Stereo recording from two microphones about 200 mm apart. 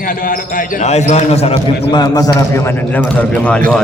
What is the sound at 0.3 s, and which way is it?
Speech, 40° left (ahead or behind).